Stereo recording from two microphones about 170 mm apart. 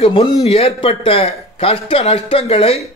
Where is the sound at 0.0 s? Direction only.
35° left (ahead or behind).